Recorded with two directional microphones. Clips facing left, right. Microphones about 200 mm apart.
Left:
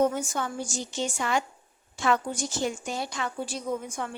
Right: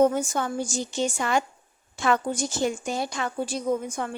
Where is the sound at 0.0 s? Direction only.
45° right (ahead or behind).